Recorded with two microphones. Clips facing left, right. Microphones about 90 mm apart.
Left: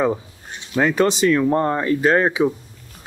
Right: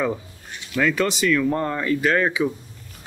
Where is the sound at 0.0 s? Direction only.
30° left (ahead or behind).